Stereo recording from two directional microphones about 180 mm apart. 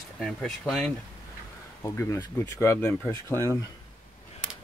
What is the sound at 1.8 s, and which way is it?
Speech, 15° left (ahead or behind).